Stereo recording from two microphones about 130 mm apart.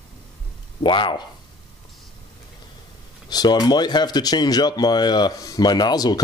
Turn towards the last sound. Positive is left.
turn(degrees=30)  # may be behind; listen again after turning